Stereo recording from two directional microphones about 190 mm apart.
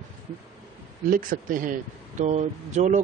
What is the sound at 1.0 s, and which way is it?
A man's voice, 45° right (ahead or behind).